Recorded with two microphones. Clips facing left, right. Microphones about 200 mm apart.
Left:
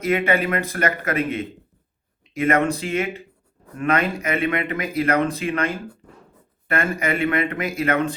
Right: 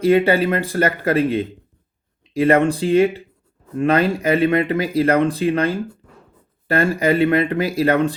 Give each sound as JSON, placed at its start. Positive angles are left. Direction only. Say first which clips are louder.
{"t": 0.0, "sound": "speech", "louder": "right 6 dB", "side_deg": -30}